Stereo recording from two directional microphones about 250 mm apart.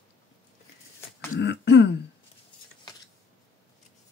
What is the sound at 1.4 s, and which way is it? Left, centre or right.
Speech, left.